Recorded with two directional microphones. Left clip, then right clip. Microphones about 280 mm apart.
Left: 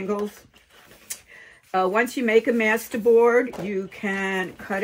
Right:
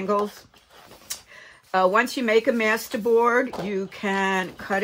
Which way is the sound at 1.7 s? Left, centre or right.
Centre.